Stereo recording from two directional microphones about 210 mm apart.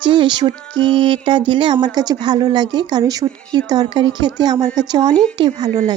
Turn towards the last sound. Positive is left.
turn(degrees=-20)  # may be behind; listen again after turning